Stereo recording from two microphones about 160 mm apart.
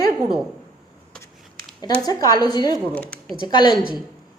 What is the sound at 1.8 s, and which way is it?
Speech, 25° left (ahead or behind).